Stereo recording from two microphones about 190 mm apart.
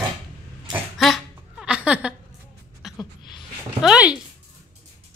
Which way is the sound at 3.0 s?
25° left (ahead or behind).